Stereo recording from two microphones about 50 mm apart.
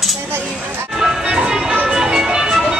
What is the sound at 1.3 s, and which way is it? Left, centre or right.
Music, centre.